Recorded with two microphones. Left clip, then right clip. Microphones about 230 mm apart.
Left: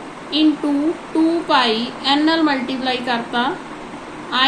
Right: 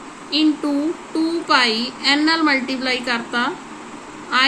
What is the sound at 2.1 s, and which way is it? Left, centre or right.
A woman's voice, right.